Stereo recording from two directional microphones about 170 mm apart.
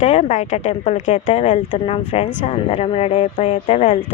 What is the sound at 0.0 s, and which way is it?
Speech, 40° left (ahead or behind).